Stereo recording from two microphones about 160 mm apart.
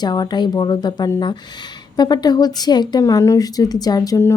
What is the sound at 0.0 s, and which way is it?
A woman's voice, 25° left (ahead or behind).